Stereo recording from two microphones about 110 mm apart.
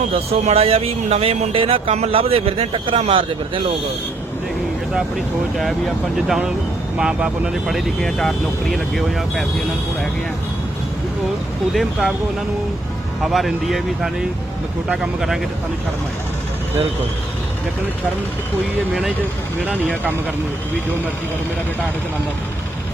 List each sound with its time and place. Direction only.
0.1 s speech: 65° right (ahead or behind)
5.5 s speech: centre (ahead or behind)
11.7 s speech: centre (ahead or behind)
13.2 s speech: centre (ahead or behind)